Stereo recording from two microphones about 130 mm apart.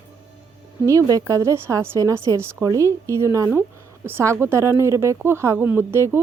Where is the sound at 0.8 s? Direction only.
25° right (ahead or behind).